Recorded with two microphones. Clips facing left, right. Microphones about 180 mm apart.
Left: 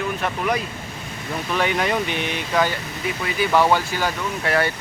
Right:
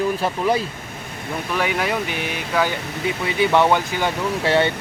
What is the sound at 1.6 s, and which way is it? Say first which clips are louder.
Speech: left 1 dB; 5° right (ahead or behind).